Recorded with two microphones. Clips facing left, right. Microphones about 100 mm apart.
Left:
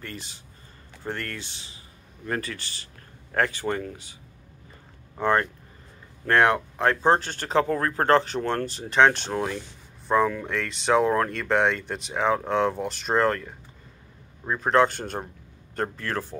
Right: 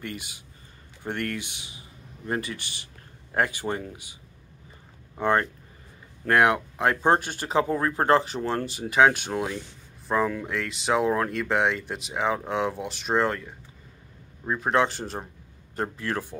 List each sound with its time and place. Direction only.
1.0 s speech: 20° right (ahead or behind)
5.2 s speech: 15° right (ahead or behind); by 15.2 s centre (ahead or behind)
16.0 s speech: 15° right (ahead or behind)